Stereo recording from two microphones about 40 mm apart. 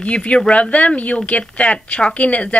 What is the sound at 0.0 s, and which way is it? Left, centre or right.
A woman's voice, left.